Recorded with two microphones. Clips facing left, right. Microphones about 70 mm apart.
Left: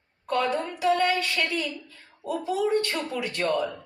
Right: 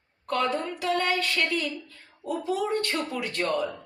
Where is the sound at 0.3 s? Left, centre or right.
Centre.